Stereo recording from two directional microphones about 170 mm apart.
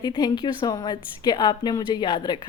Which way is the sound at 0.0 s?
25° left (ahead or behind).